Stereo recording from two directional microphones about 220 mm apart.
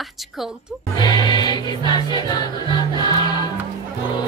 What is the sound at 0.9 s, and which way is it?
Music, 20° left (ahead or behind).